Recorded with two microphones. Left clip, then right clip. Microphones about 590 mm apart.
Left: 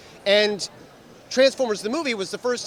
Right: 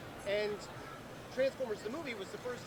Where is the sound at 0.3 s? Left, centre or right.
Left.